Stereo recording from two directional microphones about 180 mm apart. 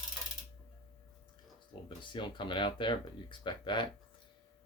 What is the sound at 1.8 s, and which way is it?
Speech, 25° left (ahead or behind).